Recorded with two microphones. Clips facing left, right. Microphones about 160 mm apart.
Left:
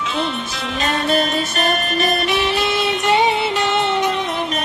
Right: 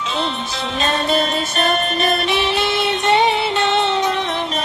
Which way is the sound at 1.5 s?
25° right (ahead or behind).